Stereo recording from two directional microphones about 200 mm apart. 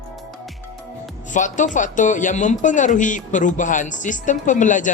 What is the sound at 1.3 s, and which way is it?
Speech, 40° left (ahead or behind).